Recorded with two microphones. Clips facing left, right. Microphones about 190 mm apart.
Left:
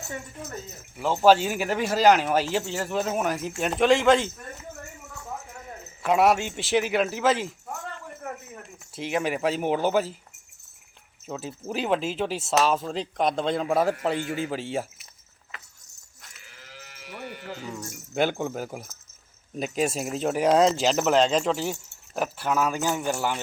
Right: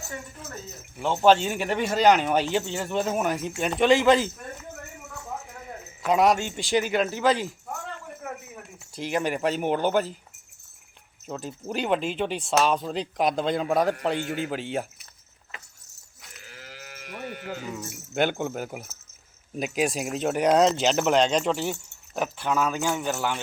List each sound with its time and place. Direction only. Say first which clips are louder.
0.9 s speech: left 1 dB; 5° left (ahead or behind)
6.0 s speech: even; 5° left (ahead or behind)
8.2 s a sound: even; 5° right (ahead or behind)
8.9 s speech: even; centre (ahead or behind)
11.3 s speech: even; centre (ahead or behind)
16.8 s sheep: right 2 dB; 50° right (ahead or behind)
17.4 s speech: right 2 dB; 10° right (ahead or behind); by 23.4 s 10° left (ahead or behind)